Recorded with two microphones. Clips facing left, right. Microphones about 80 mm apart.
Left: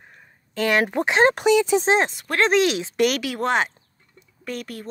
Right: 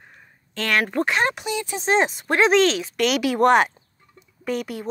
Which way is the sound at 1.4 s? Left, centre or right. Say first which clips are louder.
Left 10 dB; left.